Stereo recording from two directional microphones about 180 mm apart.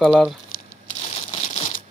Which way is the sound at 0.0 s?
5° right (ahead or behind).